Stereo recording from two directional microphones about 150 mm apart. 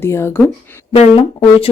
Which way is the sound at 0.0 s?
15° left (ahead or behind).